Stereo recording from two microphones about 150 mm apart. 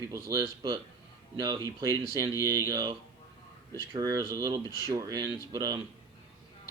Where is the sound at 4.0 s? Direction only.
25° right (ahead or behind).